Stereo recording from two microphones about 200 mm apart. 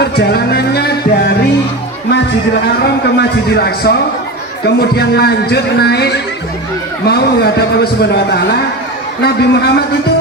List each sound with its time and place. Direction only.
0.0 s music: 55° left (ahead or behind)
3.2 s a man's voice: 50° left (ahead or behind)